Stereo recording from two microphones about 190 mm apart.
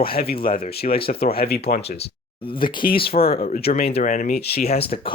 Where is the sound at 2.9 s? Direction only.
30° left (ahead or behind).